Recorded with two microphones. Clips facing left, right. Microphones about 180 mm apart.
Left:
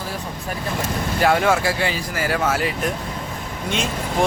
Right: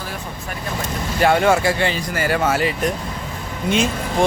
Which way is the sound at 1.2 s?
Centre (ahead or behind).